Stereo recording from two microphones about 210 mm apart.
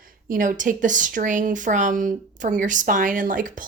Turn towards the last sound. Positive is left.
turn(degrees=-40)  # may be behind; listen again after turning